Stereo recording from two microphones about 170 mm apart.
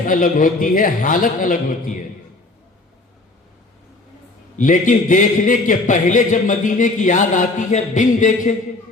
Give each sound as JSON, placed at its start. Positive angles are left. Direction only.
{"t": 0.0, "sound": "a man's voice", "side_deg": 55}
{"t": 4.5, "sound": "a man's voice", "side_deg": 50}